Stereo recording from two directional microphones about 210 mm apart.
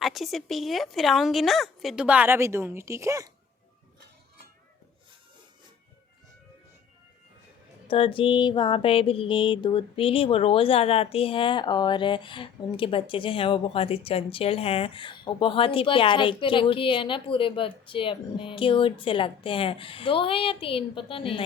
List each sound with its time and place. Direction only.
0.0 s a woman's voice: centre (ahead or behind)
7.9 s mantra: 25° left (ahead or behind)